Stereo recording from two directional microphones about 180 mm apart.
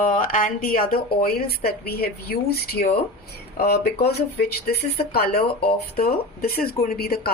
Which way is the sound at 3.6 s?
60° left (ahead or behind).